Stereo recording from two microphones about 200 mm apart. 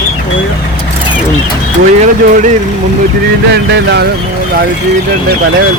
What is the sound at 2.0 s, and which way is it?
Speech, 40° right (ahead or behind).